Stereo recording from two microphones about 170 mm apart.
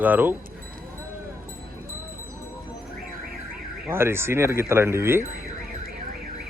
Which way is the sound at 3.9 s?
15° right (ahead or behind).